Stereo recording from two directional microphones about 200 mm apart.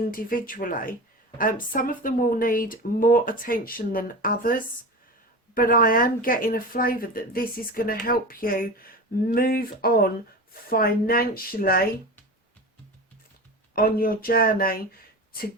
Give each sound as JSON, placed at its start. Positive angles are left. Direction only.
{"t": 0.1, "sound": "speech", "side_deg": 45}
{"t": 13.7, "sound": "speech", "side_deg": 50}